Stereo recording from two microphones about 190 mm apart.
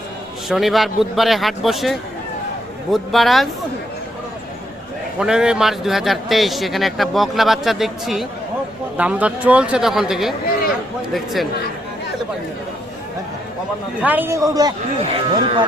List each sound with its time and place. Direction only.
0.4 s a man's voice: centre (ahead or behind)
5.2 s a man's voice: 5° right (ahead or behind)
14.0 s speech: 10° right (ahead or behind); by 15.6 s 25° right (ahead or behind)